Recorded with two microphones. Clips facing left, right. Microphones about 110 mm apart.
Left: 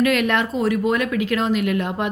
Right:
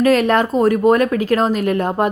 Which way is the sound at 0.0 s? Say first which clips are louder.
Right 5 dB; 35° right (ahead or behind).